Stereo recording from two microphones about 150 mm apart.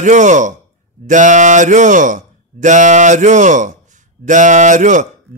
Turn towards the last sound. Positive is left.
turn(degrees=-55)  # may be behind; listen again after turning